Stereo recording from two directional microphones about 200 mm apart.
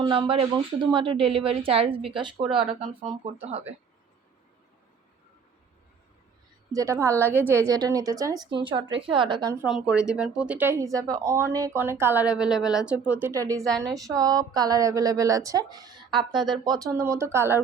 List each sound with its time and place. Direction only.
0.0 s speech: 25° right (ahead or behind)
6.7 s a woman's voice: 15° right (ahead or behind)
9.6 s a woman's voice: 5° right (ahead or behind)
13.7 s speech: 5° left (ahead or behind)
13.9 s a woman's voice: 15° right (ahead or behind)